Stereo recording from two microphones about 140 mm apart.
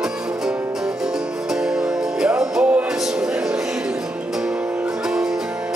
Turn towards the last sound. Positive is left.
turn(degrees=-5)  # may be behind; listen again after turning